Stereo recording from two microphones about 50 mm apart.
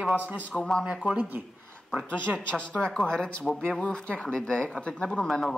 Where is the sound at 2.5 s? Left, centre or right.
Left.